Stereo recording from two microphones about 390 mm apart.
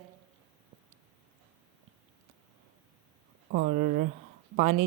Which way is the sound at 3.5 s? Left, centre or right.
Right.